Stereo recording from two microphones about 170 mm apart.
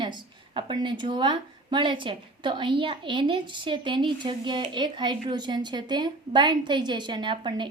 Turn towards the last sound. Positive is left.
turn(degrees=-30)  # may be behind; listen again after turning